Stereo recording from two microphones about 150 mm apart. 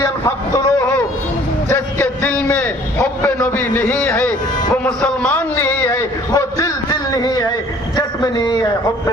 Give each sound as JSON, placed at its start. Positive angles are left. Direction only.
{"t": 0.0, "sound": "vehicle", "side_deg": 20}
{"t": 1.7, "sound": "a sound", "side_deg": 10}
{"t": 3.0, "sound": "a man's voice", "side_deg": 10}